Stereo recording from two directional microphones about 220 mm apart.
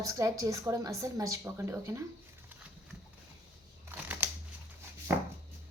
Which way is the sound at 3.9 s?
10° right (ahead or behind).